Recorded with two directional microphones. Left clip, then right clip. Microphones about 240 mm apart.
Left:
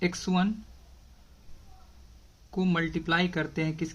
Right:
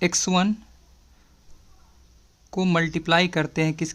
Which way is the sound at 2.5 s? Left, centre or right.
Right.